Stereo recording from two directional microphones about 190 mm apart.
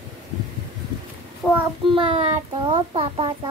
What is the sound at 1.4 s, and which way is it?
Child singing, 5° right (ahead or behind).